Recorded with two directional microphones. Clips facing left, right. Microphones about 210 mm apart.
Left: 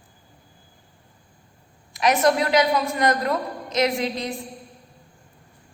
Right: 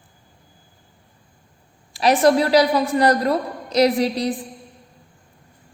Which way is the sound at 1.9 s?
30° right (ahead or behind).